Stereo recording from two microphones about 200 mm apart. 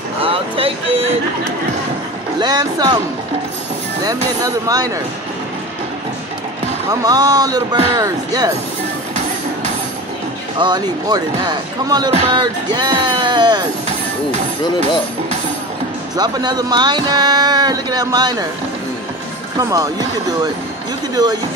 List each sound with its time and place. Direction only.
0.2 s vehicle: 30° right (ahead or behind)
2.4 s speech: 20° right (ahead or behind)
4.4 s speech: 20° right (ahead or behind)
6.9 s speech: 15° right (ahead or behind)
10.6 s speech: 20° right (ahead or behind)
16.2 s speech: 20° right (ahead or behind)
19.6 s speech: 15° right (ahead or behind)
21.1 s speech: 20° right (ahead or behind)